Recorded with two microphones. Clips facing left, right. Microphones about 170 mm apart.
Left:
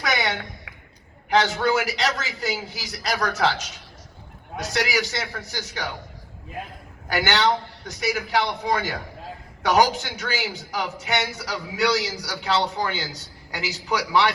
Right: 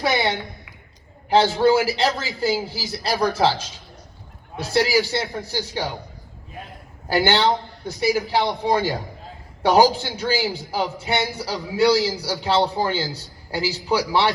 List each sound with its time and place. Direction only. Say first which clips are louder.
0.0 s a sound: right 4 dB; 30° right (ahead or behind)
1.3 s a man's voice: right 5 dB; 30° right (ahead or behind)
4.7 s a man's voice: right 6 dB; 30° right (ahead or behind)
7.1 s a man's voice: right 3 dB; 30° right (ahead or behind)